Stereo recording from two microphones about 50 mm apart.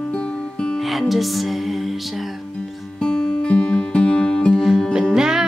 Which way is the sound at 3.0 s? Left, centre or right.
Centre.